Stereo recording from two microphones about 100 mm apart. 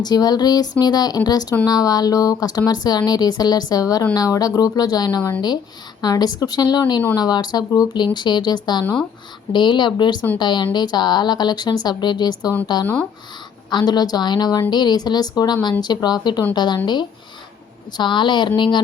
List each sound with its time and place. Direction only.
0.0 s a woman's voice: 40° left (ahead or behind)
13.7 s a woman's voice: 45° left (ahead or behind)